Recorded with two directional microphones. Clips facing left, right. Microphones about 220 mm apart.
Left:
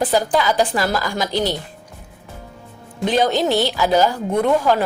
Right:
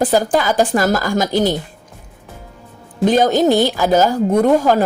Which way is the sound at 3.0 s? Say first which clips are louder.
Right 5 dB; 45° right (ahead or behind).